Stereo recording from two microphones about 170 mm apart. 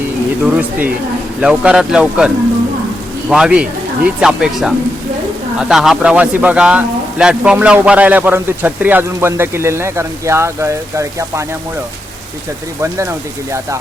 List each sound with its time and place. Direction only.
0.4 s a man's voice: 5° right (ahead or behind)
12.8 s a man's voice: 15° right (ahead or behind)